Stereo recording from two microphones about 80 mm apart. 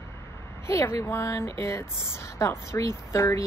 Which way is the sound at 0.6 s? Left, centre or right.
Left.